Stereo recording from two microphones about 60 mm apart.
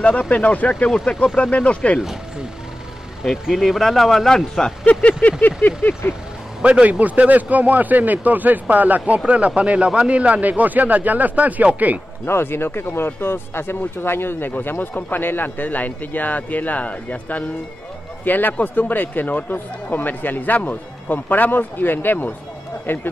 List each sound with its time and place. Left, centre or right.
0.0 s speech: left
3.3 s speech: centre
4.8 s speech: left
5.4 s vehicle: left
6.6 s a man's voice: right
12.3 s speech: left